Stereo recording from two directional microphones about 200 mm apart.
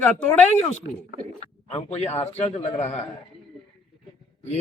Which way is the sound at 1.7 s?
30° left (ahead or behind).